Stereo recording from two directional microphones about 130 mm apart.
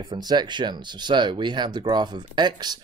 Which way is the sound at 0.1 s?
35° right (ahead or behind).